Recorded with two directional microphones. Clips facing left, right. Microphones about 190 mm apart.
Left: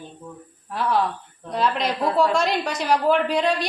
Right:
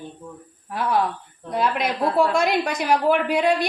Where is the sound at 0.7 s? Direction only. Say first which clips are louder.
Even; 10° right (ahead or behind).